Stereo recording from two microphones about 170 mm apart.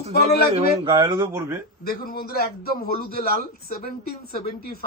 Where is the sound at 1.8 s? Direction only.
65° left (ahead or behind).